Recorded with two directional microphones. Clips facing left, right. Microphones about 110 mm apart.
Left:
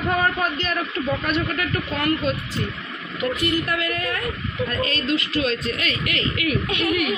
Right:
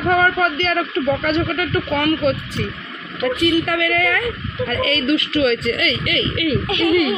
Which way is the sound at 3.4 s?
90° right.